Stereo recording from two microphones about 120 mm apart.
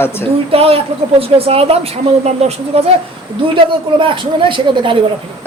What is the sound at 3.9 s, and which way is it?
Speech, 45° right (ahead or behind).